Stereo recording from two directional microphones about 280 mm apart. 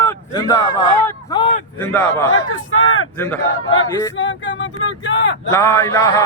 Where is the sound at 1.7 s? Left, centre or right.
Centre.